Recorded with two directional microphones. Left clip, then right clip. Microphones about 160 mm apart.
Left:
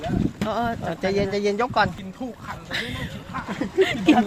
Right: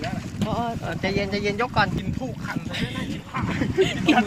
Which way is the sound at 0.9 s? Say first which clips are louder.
Left 2 dB; 70° left (ahead or behind).